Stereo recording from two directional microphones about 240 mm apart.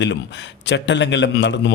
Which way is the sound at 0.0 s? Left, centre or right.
Left.